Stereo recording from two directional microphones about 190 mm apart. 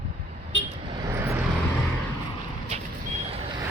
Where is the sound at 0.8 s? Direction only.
20° right (ahead or behind).